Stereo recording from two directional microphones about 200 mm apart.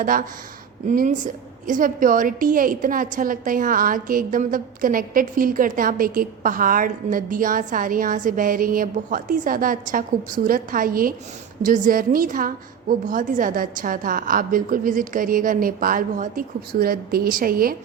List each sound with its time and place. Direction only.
0.0 s a woman's voice: 45° right (ahead or behind)